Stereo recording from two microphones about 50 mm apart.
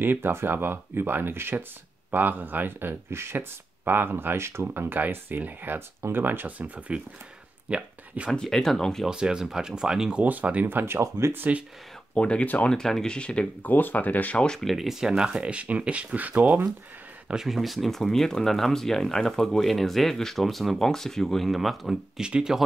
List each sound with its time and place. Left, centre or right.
0.0 s speech: right
2.0 s speech: right
6.9 s speech: right
8.3 s speech: centre
9.1 s speech: centre
10.2 s speech: right
11.0 s speech: right
12.2 s speech: left
12.6 s speech: centre
13.6 s speech: left
14.3 s speech: centre
14.6 s speech: centre; by 16.5 s right
17.3 s speech: centre
22.2 s speech: centre